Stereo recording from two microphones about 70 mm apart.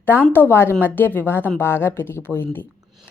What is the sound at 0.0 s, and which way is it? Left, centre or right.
A woman's voice, left.